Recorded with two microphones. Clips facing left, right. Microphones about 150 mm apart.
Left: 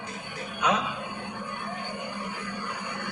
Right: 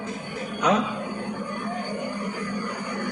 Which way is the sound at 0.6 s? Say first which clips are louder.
Right 4 dB; 40° right (ahead or behind).